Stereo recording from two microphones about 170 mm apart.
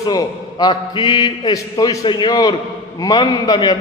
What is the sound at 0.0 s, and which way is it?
A man's voice, 20° left (ahead or behind).